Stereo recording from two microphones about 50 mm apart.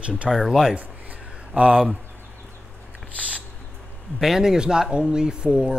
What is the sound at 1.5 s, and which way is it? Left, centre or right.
Speech, right.